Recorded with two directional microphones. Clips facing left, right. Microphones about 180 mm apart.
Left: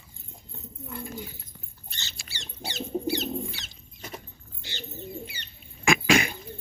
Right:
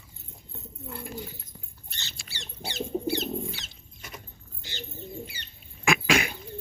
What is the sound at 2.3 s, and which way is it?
Bird, 55° right (ahead or behind).